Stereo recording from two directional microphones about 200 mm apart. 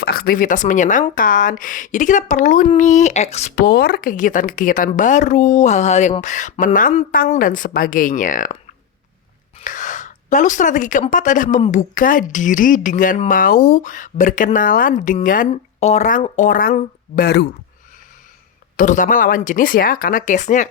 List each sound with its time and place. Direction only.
0.0 s a woman's voice: 45° left (ahead or behind)
9.6 s a sound: 40° left (ahead or behind)
11.1 s a woman's voice: 40° left (ahead or behind)
18.8 s a woman's voice: 40° left (ahead or behind)